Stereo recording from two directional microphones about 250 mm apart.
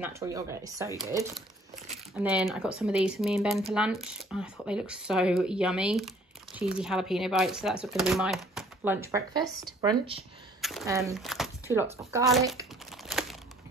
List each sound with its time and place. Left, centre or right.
0.0 s speech: centre
2.1 s speech: centre
10.6 s a sound: centre
10.9 s speech: centre
11.1 s speech: centre
12.9 s crumpling: centre